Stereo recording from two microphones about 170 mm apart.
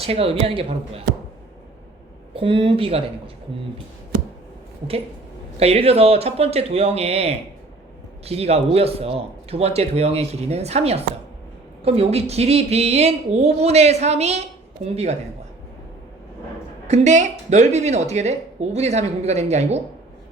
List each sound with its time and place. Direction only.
0.0 s speech: 35° right (ahead or behind)
2.3 s speech: 30° right (ahead or behind)
5.5 s speech: 35° right (ahead or behind)
16.8 s speech: 40° right (ahead or behind)